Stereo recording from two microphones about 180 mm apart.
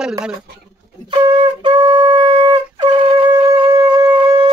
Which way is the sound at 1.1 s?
25° right (ahead or behind).